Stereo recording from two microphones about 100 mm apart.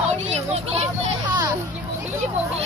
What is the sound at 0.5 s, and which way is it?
Children playing, 90° right.